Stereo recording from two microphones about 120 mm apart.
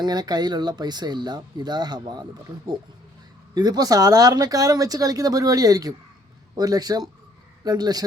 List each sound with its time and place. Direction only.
0.0 s speech: 35° right (ahead or behind)
3.5 s speech: 35° right (ahead or behind)